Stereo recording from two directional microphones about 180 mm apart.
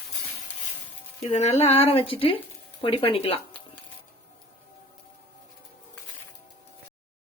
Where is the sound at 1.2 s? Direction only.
35° left (ahead or behind).